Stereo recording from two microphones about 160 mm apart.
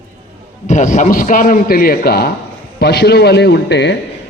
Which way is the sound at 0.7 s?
50° left (ahead or behind).